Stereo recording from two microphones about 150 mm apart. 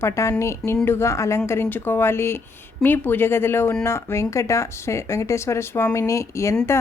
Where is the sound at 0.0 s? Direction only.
20° left (ahead or behind).